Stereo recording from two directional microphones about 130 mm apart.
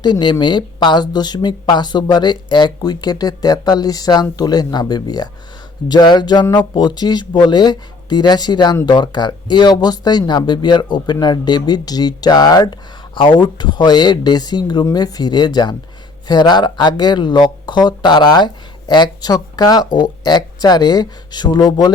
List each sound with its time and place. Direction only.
0.0 s speech: 35° left (ahead or behind)